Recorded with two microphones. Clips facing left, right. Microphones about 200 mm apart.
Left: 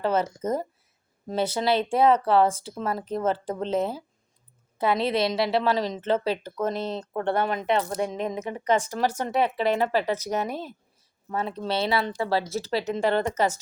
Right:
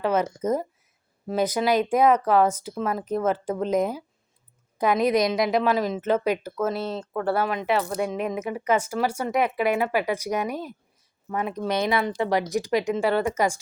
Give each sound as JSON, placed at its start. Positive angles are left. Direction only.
{"t": 0.0, "sound": "speech", "side_deg": -10}
{"t": 1.3, "sound": "speech", "side_deg": -10}
{"t": 4.9, "sound": "speech", "side_deg": 30}
{"t": 5.5, "sound": "speech", "side_deg": -15}
{"t": 7.9, "sound": "speech", "side_deg": 30}
{"t": 8.6, "sound": "speech", "side_deg": -10}